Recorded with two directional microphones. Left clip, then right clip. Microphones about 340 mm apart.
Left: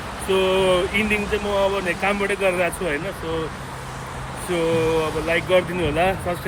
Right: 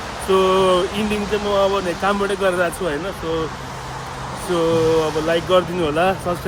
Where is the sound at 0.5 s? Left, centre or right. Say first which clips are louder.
Right 2 dB; centre.